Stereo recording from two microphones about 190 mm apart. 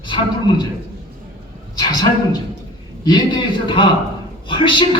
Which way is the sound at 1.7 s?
20° left (ahead or behind).